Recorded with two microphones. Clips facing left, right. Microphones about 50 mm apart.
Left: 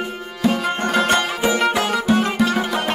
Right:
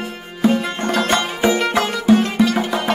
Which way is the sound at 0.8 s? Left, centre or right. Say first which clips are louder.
Left 1 dB; left.